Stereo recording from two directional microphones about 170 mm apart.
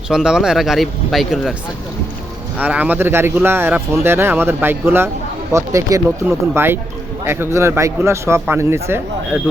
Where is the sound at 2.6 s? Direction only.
10° right (ahead or behind).